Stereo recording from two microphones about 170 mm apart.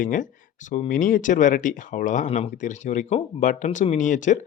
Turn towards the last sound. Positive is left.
turn(degrees=45)  # may be behind; listen again after turning